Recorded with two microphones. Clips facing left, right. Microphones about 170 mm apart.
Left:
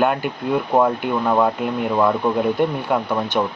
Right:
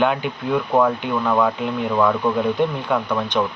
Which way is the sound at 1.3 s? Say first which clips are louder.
Left 1 dB; 15° left (ahead or behind).